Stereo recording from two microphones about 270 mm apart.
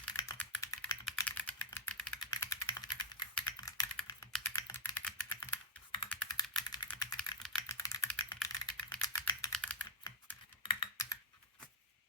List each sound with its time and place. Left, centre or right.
0.2 s typing: centre
6.1 s computer keyboard: centre
6.6 s typing: centre
6.8 s typing: centre
10.0 s computer keyboard: centre